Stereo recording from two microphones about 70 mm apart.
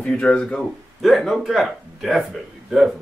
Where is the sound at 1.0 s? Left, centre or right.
Centre.